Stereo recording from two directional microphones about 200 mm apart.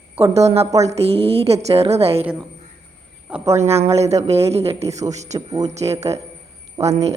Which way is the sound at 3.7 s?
30° right (ahead or behind).